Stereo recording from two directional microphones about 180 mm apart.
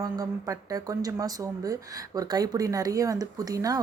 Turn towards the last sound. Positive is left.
turn(degrees=-20)  # may be behind; listen again after turning